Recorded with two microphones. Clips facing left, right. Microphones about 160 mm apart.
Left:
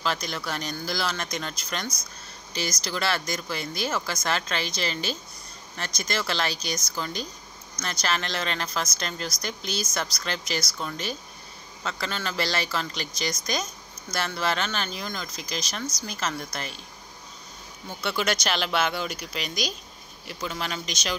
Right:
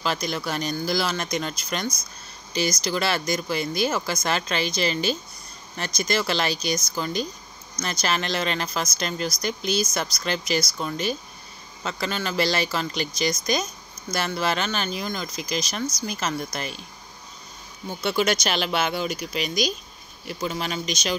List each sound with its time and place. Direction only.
0.0 s speech: 15° right (ahead or behind)
18.0 s speech: 15° right (ahead or behind)